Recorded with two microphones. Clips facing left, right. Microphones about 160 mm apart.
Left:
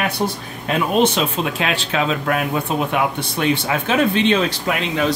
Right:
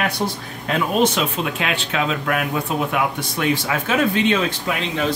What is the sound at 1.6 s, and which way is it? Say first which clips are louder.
Speech: left 2 dB; 35° left (ahead or behind).